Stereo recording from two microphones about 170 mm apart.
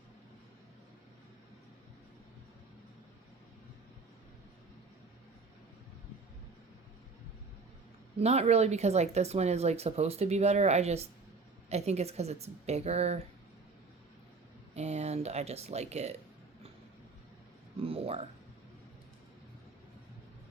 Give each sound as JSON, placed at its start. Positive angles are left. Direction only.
{"t": 8.2, "sound": "speech", "side_deg": -40}
{"t": 14.8, "sound": "speech", "side_deg": -40}
{"t": 17.7, "sound": "speech", "side_deg": -35}